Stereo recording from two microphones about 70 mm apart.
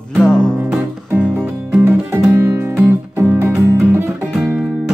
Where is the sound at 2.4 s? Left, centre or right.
Right.